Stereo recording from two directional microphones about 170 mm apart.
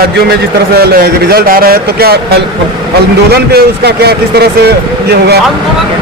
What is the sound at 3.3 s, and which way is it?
Speech, 70° right (ahead or behind).